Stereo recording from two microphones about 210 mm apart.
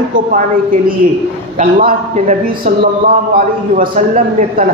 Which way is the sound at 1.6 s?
40° right (ahead or behind).